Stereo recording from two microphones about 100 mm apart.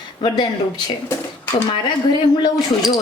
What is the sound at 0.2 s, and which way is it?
Speech, 50° left (ahead or behind).